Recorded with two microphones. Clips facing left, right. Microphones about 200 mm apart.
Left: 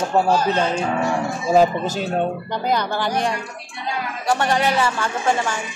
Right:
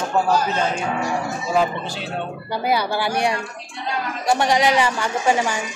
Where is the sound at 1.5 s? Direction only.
40° left (ahead or behind).